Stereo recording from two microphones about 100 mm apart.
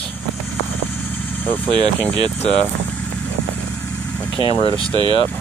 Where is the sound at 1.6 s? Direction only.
50° right (ahead or behind).